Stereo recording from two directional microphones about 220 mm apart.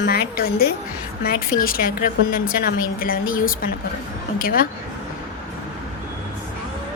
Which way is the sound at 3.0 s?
40° left (ahead or behind).